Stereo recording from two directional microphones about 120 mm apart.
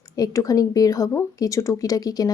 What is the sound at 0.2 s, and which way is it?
A woman's voice, 30° left (ahead or behind).